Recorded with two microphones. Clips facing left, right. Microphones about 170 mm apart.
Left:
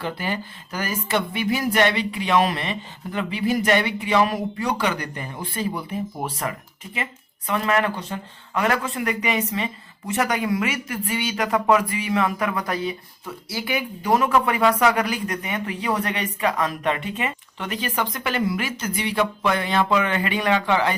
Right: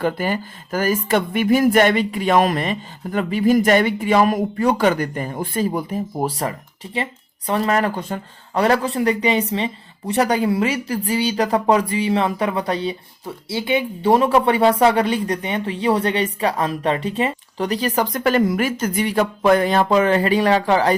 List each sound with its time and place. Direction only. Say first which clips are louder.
0.0 s speech: right 6 dB; 45° right (ahead or behind)